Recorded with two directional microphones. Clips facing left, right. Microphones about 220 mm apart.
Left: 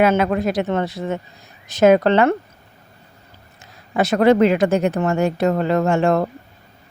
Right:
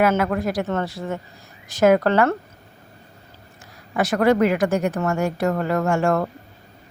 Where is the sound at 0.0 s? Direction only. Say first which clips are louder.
Left 3 dB; 20° left (ahead or behind).